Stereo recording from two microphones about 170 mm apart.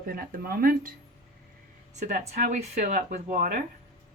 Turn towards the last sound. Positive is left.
turn(degrees=-50)  # may be behind; listen again after turning